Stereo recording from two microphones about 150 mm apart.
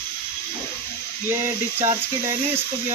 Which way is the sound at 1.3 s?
20° right (ahead or behind).